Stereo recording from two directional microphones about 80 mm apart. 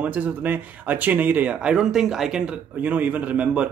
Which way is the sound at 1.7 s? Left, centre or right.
Centre.